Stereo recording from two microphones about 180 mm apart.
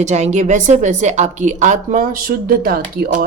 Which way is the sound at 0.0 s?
40° right (ahead or behind).